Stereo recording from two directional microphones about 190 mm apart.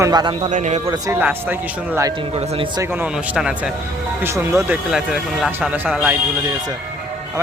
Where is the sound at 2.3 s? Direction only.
25° right (ahead or behind).